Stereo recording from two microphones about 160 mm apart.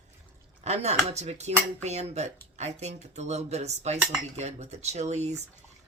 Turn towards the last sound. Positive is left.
turn(degrees=-45)  # may be behind; listen again after turning